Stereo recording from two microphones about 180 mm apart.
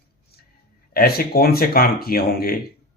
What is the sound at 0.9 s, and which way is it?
Speech, 55° left (ahead or behind).